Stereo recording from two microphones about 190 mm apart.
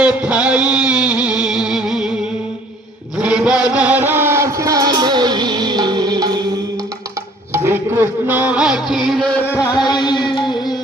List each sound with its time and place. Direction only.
0.0 s music: 5° right (ahead or behind)
3.2 s a sound: 5° right (ahead or behind); by 6.4 s 20° right (ahead or behind)
7.5 s music: 10° right (ahead or behind); by 10.8 s 25° left (ahead or behind)